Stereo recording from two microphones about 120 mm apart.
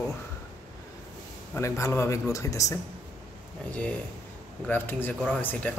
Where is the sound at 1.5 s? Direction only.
25° left (ahead or behind).